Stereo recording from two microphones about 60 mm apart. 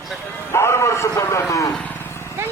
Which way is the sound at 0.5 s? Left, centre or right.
Left.